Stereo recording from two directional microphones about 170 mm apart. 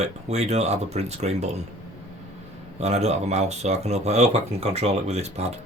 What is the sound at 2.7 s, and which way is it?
Speech, 40° right (ahead or behind).